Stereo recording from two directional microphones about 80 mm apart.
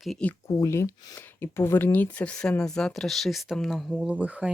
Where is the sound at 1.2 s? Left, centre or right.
Left; by 4.0 s centre.